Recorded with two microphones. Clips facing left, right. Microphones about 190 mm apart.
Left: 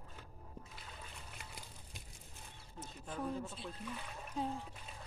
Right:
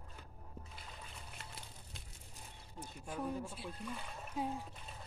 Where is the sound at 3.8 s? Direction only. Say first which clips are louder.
Right 2 dB; 5° left (ahead or behind).